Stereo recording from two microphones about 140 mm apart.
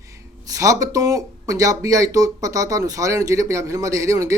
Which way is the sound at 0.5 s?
25° right (ahead or behind).